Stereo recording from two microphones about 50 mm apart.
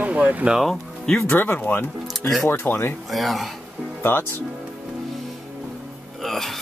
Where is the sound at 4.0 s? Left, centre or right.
Left.